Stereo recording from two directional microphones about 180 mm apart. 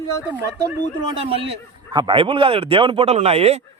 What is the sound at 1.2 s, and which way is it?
A man's voice, 30° right (ahead or behind).